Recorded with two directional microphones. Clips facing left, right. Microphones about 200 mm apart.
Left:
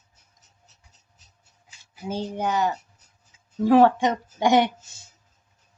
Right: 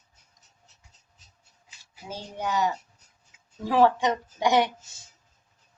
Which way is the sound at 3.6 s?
55° left (ahead or behind).